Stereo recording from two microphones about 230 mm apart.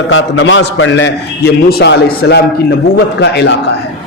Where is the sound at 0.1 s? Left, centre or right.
Left.